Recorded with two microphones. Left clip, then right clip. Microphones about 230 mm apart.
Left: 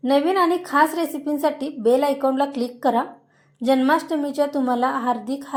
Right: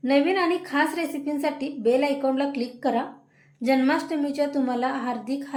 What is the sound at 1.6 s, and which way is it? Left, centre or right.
Speech, left.